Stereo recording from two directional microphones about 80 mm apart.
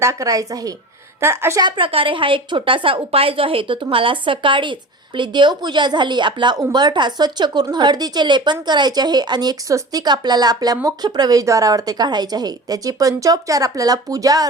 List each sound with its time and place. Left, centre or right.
0.0 s speech: right
1.2 s a woman's voice: right
1.6 s a woman's voice: right